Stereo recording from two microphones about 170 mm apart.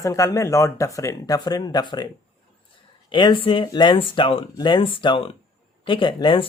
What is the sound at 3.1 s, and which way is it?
Speech, 30° left (ahead or behind).